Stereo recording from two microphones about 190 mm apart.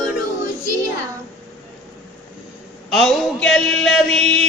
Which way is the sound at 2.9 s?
Centre (ahead or behind).